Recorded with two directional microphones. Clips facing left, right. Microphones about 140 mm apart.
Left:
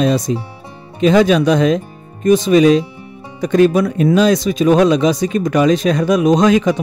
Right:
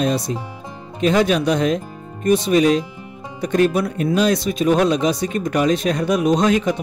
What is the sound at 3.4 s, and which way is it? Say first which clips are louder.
Speech: left 5 dB; 90° left.